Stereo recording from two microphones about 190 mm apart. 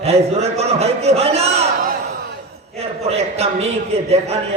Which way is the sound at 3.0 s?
35° right (ahead or behind).